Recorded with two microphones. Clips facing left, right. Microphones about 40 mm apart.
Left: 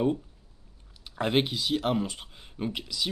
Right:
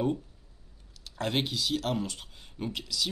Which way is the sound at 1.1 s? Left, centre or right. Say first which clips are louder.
Left 4 dB; centre.